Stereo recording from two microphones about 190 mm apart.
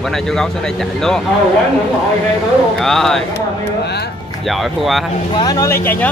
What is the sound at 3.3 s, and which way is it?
Speech, 60° left (ahead or behind).